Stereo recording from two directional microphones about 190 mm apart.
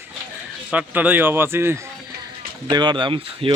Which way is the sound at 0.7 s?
10° right (ahead or behind).